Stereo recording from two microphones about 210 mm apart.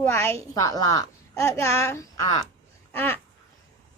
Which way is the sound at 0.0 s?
10° left (ahead or behind).